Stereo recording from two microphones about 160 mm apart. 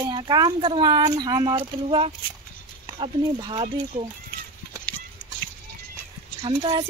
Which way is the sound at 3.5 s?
35° right (ahead or behind).